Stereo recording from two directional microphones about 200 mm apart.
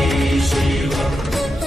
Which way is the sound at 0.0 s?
Centre (ahead or behind).